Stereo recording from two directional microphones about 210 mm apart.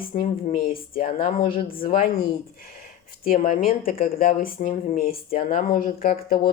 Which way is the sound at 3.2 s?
45° left (ahead or behind).